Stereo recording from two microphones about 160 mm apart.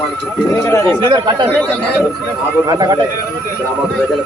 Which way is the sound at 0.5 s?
20° left (ahead or behind).